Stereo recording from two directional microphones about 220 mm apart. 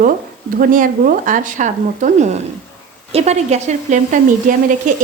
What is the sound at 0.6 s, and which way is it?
Speech, 40° right (ahead or behind).